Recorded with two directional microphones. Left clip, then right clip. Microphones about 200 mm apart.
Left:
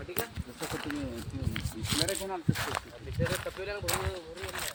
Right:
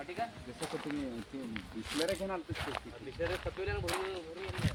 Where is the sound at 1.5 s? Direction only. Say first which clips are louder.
Left 6 dB; 50° left (ahead or behind).